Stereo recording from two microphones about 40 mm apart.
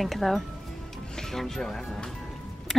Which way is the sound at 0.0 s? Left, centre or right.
Centre.